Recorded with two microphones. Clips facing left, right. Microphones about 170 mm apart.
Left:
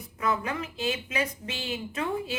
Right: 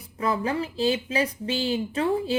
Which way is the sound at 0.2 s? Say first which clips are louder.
Right 4 dB; 30° right (ahead or behind).